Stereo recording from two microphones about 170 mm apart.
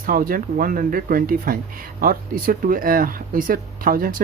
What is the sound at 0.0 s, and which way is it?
Speech, 55° right (ahead or behind).